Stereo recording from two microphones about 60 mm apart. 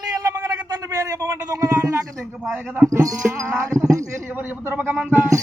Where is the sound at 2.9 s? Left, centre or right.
Right.